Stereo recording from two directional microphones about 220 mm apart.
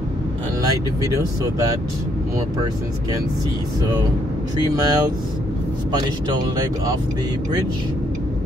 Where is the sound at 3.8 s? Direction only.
15° right (ahead or behind).